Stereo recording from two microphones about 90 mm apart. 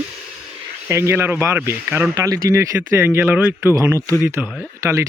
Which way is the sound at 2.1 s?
35° right (ahead or behind).